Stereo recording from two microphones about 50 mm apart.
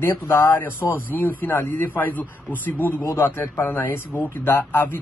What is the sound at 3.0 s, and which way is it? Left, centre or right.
Speech, left.